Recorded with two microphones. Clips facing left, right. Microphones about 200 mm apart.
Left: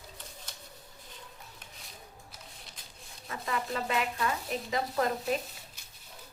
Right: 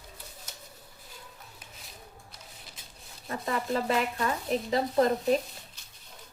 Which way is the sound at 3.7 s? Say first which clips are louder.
Right 5 dB; 35° right (ahead or behind).